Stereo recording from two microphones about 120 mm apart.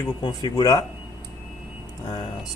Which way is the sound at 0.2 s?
35° left (ahead or behind).